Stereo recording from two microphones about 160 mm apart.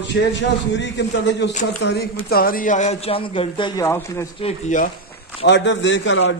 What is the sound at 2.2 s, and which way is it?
Speech, 70° left (ahead or behind).